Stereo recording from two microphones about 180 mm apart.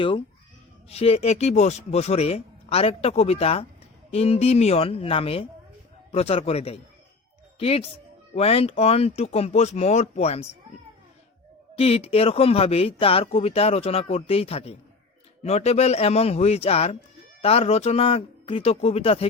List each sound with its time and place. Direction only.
0.9 s speech: 35° left (ahead or behind)
11.8 s speech: 35° left (ahead or behind)